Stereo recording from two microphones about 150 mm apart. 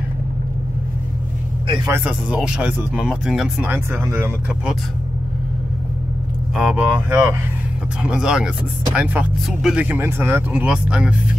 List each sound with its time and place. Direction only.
1.9 s speech: 15° right (ahead or behind)
6.5 s speech: 5° right (ahead or behind)